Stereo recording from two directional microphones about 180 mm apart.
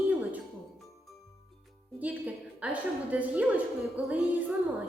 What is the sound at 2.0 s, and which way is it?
A woman's voice, 10° right (ahead or behind).